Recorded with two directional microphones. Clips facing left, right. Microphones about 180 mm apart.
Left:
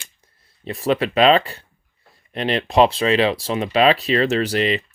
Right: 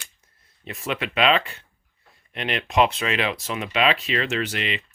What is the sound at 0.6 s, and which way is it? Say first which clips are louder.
Speech: left 9 dB; 35° left (ahead or behind).